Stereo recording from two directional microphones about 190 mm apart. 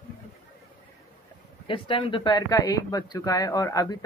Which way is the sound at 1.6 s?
25° left (ahead or behind).